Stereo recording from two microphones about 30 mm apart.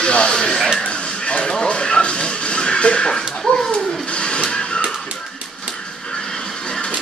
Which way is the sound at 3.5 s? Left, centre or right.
Left.